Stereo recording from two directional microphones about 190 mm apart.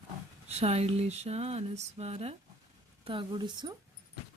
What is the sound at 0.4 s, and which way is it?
A woman's voice, 35° right (ahead or behind).